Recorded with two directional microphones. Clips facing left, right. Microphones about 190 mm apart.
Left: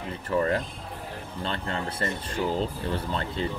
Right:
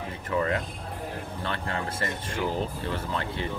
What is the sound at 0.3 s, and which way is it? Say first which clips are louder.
Speech: left 2 dB; 35° left (ahead or behind).